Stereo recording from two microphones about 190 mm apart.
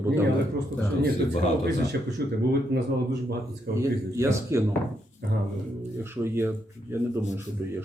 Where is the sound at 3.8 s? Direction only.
15° right (ahead or behind).